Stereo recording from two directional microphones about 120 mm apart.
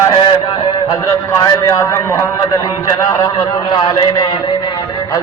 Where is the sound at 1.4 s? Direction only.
30° left (ahead or behind).